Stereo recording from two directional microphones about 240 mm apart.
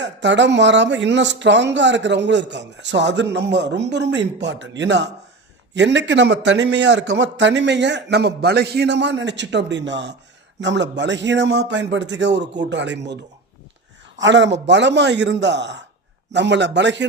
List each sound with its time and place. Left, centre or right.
0.0 s speech: right
14.2 s speech: right